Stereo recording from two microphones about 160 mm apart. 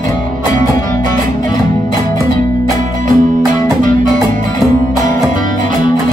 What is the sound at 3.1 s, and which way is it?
Music, 50° right (ahead or behind).